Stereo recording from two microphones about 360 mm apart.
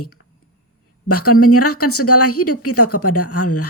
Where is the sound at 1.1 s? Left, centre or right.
Left.